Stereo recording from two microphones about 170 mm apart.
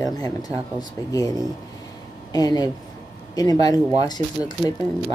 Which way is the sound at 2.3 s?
20° left (ahead or behind).